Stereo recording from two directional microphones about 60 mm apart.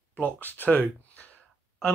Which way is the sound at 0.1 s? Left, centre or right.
Left.